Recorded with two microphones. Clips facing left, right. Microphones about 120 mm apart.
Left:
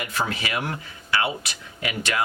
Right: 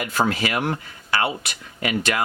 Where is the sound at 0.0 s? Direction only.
45° right (ahead or behind).